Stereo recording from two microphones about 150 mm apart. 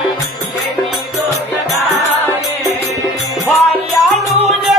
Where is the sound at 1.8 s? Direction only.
50° left (ahead or behind).